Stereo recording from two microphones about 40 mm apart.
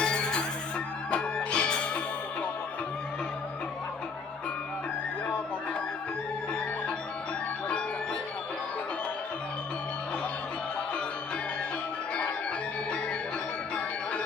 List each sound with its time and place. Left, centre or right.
0.0 s music: left